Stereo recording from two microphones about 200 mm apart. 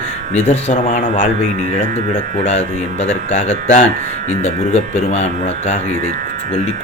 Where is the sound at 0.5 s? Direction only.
40° left (ahead or behind).